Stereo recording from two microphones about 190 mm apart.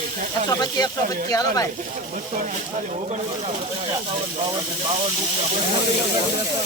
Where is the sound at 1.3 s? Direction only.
20° left (ahead or behind).